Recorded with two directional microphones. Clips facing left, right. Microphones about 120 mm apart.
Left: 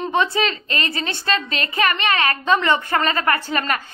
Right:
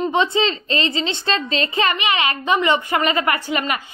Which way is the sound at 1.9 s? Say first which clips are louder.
Even; 15° right (ahead or behind).